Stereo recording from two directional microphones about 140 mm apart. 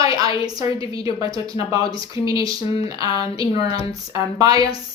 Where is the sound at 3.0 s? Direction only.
45° left (ahead or behind).